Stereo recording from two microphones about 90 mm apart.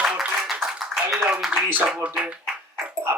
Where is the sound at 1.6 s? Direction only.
20° right (ahead or behind).